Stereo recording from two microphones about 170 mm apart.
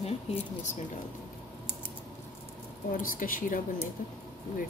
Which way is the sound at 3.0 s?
55° left (ahead or behind).